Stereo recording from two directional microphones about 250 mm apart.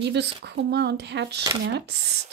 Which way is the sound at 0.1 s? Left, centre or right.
Right.